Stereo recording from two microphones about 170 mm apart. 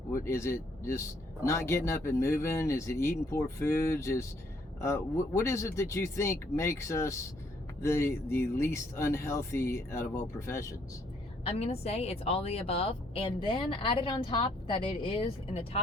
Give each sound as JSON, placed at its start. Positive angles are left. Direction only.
{"t": 0.1, "sound": "speech", "side_deg": 15}
{"t": 11.4, "sound": "a woman's voice", "side_deg": 35}